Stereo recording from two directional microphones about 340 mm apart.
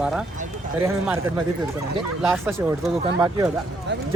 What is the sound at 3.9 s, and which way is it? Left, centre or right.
Speech, right.